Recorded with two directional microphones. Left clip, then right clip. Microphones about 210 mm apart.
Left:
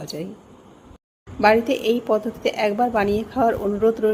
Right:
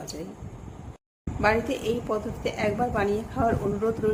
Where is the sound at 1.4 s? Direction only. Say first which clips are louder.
Left 7 dB; 25° left (ahead or behind).